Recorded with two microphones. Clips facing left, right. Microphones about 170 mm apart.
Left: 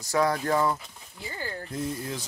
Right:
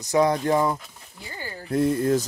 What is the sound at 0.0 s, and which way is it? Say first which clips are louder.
Speech: right 5 dB; 20° right (ahead or behind).